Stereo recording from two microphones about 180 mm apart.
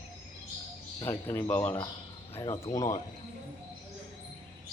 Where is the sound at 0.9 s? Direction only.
15° left (ahead or behind).